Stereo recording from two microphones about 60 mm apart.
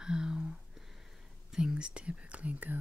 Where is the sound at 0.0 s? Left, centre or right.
Centre.